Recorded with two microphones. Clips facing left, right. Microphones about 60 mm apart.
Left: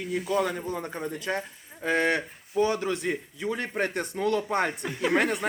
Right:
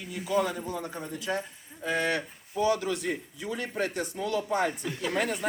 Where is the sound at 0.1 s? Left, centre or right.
Left.